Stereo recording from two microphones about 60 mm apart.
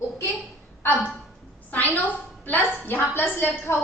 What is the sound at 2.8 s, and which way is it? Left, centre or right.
Speech, left.